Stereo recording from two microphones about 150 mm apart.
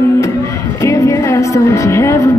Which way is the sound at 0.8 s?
20° left (ahead or behind).